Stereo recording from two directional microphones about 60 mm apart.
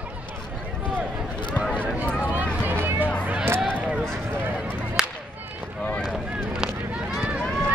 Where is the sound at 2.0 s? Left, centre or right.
Left.